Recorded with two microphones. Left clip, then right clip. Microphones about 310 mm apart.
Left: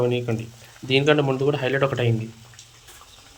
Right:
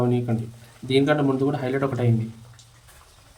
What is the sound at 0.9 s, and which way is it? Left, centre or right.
Speech, centre.